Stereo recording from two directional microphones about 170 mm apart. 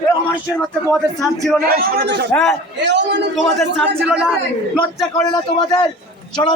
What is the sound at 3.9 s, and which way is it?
Speech, 5° right (ahead or behind).